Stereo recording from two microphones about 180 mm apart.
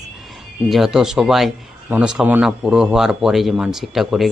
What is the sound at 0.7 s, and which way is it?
Speech, centre (ahead or behind).